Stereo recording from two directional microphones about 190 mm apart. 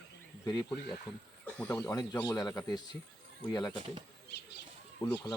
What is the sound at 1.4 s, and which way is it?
Speech, 5° left (ahead or behind).